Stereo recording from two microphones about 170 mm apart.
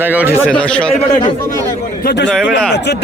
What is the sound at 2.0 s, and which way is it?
Speech, 75° left (ahead or behind).